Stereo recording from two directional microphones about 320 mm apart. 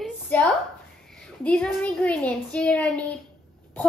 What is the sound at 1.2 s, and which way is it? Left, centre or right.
A woman's voice, centre.